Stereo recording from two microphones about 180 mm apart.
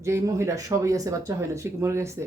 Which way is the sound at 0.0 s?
15° right (ahead or behind).